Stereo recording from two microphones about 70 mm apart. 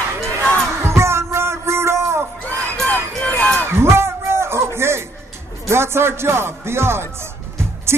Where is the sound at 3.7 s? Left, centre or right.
Right.